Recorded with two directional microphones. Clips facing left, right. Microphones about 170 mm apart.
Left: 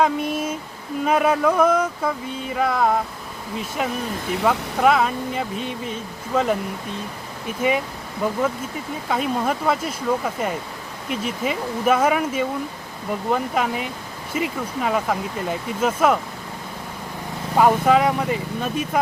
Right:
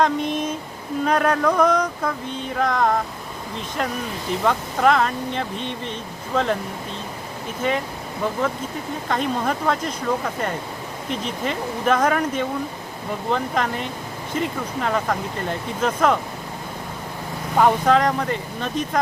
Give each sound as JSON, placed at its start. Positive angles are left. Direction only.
{"t": 0.0, "sound": "speech", "side_deg": 5}
{"t": 7.6, "sound": "speech", "side_deg": 10}
{"t": 17.6, "sound": "speech", "side_deg": 5}